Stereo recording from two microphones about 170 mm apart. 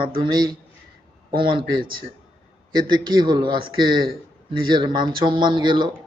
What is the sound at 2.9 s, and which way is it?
Speech, 25° right (ahead or behind).